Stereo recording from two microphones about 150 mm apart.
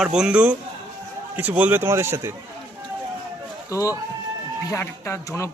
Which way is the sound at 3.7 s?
20° left (ahead or behind).